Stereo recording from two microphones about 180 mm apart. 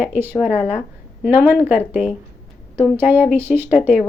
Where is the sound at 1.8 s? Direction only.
5° left (ahead or behind).